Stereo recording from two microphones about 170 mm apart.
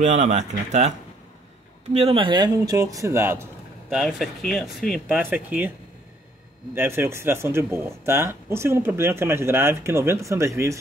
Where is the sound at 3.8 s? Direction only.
Centre (ahead or behind).